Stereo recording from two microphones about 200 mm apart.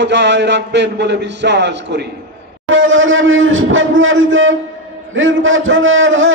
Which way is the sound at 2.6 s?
75° right (ahead or behind).